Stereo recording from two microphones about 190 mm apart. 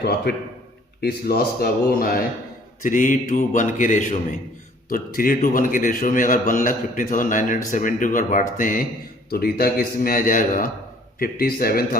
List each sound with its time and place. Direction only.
0.3 s a man's voice: 55° left (ahead or behind)